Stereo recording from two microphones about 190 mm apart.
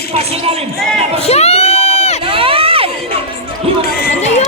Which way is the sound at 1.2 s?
35° left (ahead or behind).